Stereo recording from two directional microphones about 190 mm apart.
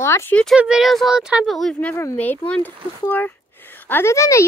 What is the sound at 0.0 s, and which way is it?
Speech, 15° left (ahead or behind).